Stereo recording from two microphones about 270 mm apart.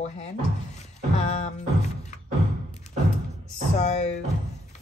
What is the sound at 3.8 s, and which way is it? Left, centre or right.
Speech, left.